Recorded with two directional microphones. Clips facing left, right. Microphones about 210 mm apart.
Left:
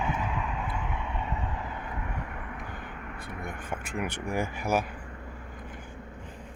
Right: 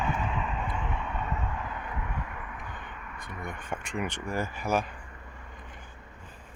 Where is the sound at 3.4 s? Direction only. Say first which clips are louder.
Right 1 dB; 5° left (ahead or behind).